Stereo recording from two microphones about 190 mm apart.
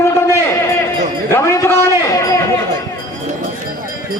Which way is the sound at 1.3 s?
15° left (ahead or behind).